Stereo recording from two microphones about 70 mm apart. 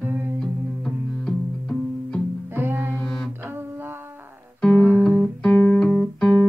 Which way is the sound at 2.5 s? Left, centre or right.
Right.